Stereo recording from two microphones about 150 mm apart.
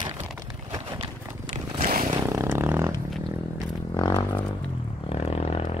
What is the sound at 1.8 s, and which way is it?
Vehicle, 75° right (ahead or behind).